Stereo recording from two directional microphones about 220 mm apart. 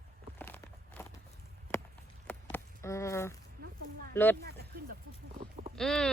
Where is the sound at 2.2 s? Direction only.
10° left (ahead or behind).